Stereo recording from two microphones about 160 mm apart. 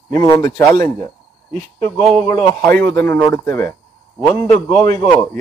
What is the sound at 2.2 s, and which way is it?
Speech, 25° left (ahead or behind).